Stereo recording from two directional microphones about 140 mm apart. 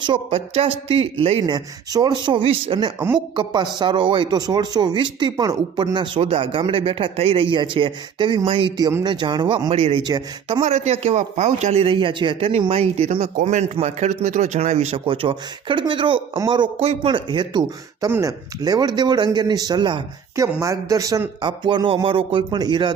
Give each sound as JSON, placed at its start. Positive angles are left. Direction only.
{"t": 0.0, "sound": "speech", "side_deg": -40}
{"t": 1.5, "sound": "speech", "side_deg": -30}
{"t": 9.7, "sound": "speech", "side_deg": -45}
{"t": 10.0, "sound": "speech", "side_deg": -30}
{"t": 10.6, "sound": "speech", "side_deg": -55}
{"t": 13.1, "sound": "speech", "side_deg": -60}
{"t": 15.0, "sound": "speech", "side_deg": -40}
{"t": 16.8, "sound": "speech", "side_deg": -45}